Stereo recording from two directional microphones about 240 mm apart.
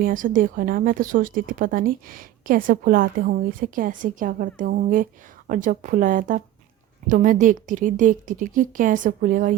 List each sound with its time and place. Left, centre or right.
0.0 s a woman's voice: right